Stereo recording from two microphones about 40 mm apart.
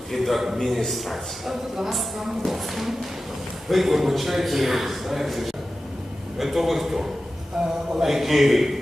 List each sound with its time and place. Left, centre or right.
0.1 s speech: centre
7.6 s a man's voice: centre
7.9 s speech: centre